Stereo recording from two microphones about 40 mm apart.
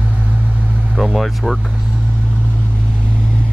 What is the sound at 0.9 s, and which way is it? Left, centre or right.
Vehicle, centre.